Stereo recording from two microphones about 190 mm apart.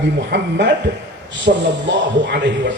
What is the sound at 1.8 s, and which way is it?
Speech, 70° right (ahead or behind).